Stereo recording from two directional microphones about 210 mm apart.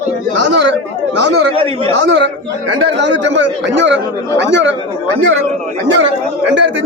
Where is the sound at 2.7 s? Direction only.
60° right (ahead or behind).